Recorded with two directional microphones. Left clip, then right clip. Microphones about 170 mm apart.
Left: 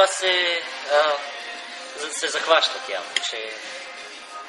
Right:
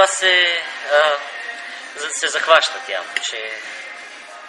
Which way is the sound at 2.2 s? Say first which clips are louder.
Right 5 dB; 15° left (ahead or behind).